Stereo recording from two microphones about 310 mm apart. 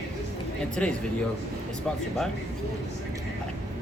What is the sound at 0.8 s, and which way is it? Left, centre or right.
Speech, centre.